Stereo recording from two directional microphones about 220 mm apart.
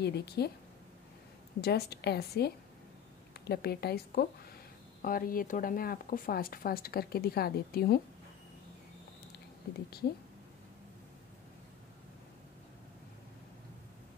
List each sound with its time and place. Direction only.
0.0 s a woman's voice: 45° left (ahead or behind)
1.6 s a woman's voice: 45° left (ahead or behind)